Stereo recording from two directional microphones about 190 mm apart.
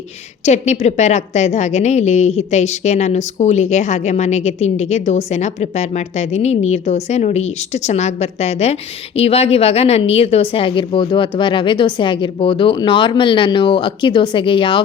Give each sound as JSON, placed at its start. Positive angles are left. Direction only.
{"t": 0.4, "sound": "a woman's voice", "side_deg": 35}